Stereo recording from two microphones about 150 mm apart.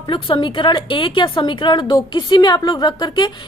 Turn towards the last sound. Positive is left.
turn(degrees=30)  # may be behind; listen again after turning